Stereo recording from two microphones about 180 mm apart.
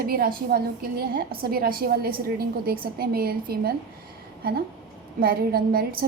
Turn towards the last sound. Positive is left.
turn(degrees=-55)  # may be behind; listen again after turning